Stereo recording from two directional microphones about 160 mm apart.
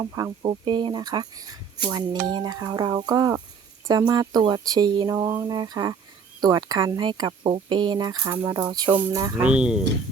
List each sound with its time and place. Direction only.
0.0 s speech: 25° right (ahead or behind)
8.9 s speech: 15° right (ahead or behind)
9.4 s speech: 5° right (ahead or behind)